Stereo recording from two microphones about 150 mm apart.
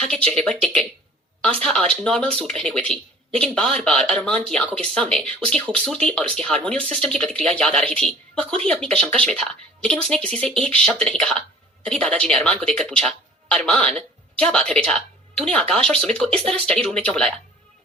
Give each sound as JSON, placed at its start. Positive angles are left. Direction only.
{"t": 0.0, "sound": "speech", "side_deg": 5}
{"t": 1.9, "sound": "speech", "side_deg": 5}